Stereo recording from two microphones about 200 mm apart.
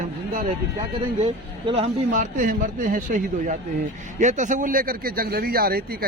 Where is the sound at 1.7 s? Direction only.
30° right (ahead or behind).